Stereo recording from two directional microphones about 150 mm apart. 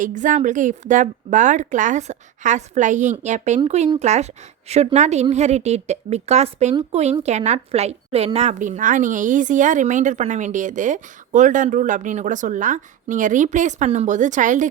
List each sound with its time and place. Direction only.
0.0 s a woman's voice: 55° right (ahead or behind)